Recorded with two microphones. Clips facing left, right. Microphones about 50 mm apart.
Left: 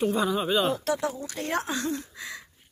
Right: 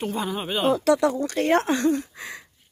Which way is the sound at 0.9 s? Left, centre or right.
Right.